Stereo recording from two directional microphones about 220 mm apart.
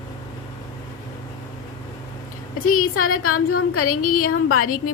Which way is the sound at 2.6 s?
75° left (ahead or behind).